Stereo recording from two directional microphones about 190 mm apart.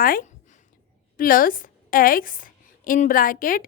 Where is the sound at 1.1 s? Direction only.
50° left (ahead or behind).